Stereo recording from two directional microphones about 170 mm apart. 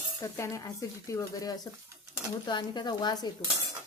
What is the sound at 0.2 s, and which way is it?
Stir, 20° left (ahead or behind).